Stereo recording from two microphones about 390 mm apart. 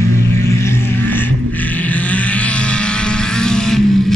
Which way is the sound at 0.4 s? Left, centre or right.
Centre.